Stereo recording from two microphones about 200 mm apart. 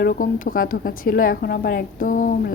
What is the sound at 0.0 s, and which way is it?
A woman's voice, 45° left (ahead or behind).